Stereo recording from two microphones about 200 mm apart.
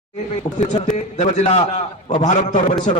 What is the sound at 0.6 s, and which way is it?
A man's voice, 35° left (ahead or behind).